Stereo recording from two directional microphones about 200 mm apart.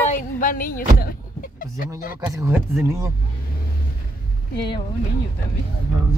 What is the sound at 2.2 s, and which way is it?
Speech, 15° right (ahead or behind).